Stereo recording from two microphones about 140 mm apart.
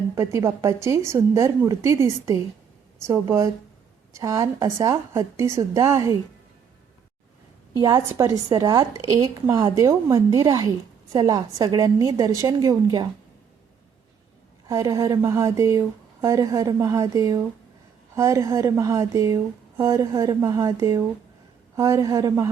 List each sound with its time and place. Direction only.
0.2 s a woman's voice: 20° right (ahead or behind)
7.8 s a woman's voice: 25° right (ahead or behind)
14.7 s a woman's voice: 25° right (ahead or behind)